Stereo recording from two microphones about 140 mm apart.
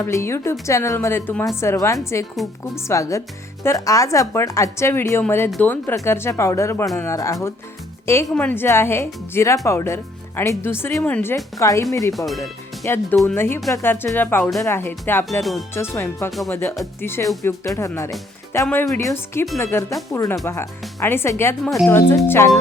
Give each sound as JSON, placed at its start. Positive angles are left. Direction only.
{"t": 0.0, "sound": "speech", "side_deg": 20}
{"t": 12.1, "sound": "speech", "side_deg": 0}
{"t": 12.4, "sound": "speech", "side_deg": 20}
{"t": 15.3, "sound": "speech", "side_deg": 0}
{"t": 15.7, "sound": "speech", "side_deg": 20}
{"t": 19.9, "sound": "speech", "side_deg": 0}
{"t": 20.4, "sound": "speech", "side_deg": 20}
{"t": 21.6, "sound": "speech", "side_deg": 0}
{"t": 21.8, "sound": "speech", "side_deg": 15}